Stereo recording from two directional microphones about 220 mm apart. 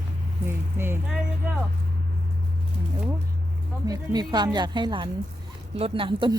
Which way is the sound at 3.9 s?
20° right (ahead or behind).